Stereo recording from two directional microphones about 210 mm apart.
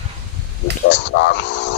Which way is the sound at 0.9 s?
55° left (ahead or behind).